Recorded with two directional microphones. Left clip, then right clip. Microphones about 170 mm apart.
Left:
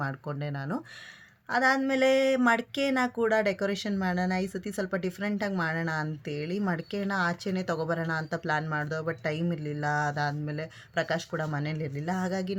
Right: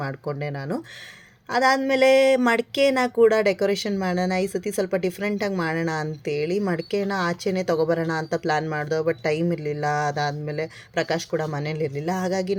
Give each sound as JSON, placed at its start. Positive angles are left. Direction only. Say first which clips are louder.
{"t": 0.0, "sound": "speech", "louder": "right 6 dB", "side_deg": -5}